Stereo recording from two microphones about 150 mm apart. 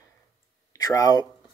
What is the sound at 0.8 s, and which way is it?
Speech, 25° left (ahead or behind).